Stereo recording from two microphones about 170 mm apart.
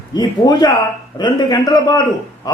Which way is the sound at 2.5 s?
20° left (ahead or behind).